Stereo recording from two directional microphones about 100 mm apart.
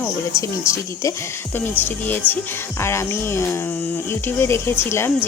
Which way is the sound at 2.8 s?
25° left (ahead or behind).